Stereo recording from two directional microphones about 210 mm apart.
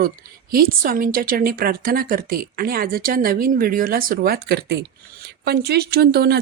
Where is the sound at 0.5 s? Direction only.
45° right (ahead or behind).